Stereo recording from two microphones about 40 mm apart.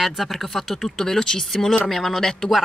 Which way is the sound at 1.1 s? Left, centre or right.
Centre.